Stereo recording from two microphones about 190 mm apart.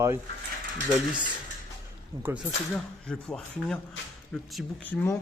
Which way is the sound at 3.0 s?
5° left (ahead or behind).